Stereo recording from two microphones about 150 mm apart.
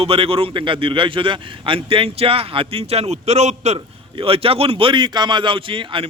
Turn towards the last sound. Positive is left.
turn(degrees=-35)  # may be behind; listen again after turning